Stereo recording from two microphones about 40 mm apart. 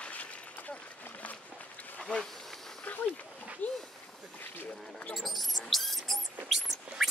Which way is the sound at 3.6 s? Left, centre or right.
Left.